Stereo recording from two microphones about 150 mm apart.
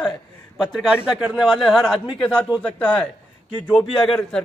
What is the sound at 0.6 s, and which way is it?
Speech, 5° right (ahead or behind).